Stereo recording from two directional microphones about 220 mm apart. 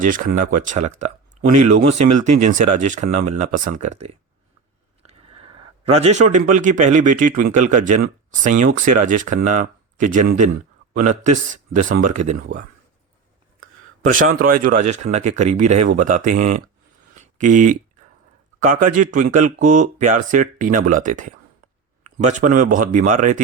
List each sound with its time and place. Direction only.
0.0 s speech: 40° right (ahead or behind)
14.0 s speech: 35° right (ahead or behind)
17.2 s a sound: 35° right (ahead or behind)
18.6 s speech: 35° right (ahead or behind)